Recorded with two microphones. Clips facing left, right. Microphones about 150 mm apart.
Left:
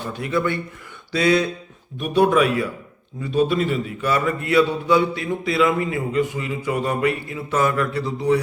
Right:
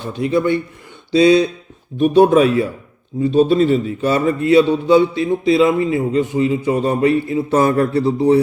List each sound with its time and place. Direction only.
0.1 s a man's voice: 25° right (ahead or behind)